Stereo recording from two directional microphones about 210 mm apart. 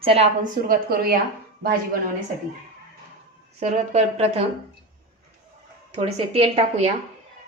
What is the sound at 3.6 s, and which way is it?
Speech, 35° right (ahead or behind).